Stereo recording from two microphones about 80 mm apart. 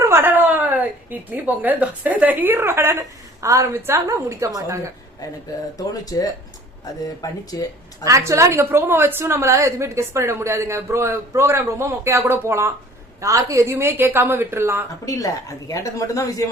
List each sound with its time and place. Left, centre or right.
0.0 s a woman's voice: right
5.7 s speech: left
7.5 s speech: left
8.0 s a woman's voice: right
15.0 s speech: left